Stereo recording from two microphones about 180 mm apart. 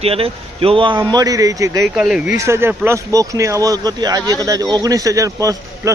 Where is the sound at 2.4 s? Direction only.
15° right (ahead or behind).